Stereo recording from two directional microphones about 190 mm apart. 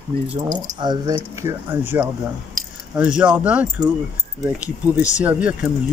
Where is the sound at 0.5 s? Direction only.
20° right (ahead or behind).